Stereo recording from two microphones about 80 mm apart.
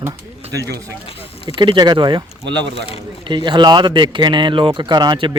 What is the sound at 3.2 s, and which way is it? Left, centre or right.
Speech, right.